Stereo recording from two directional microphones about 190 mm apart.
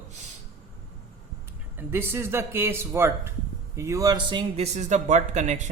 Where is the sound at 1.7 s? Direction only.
10° right (ahead or behind).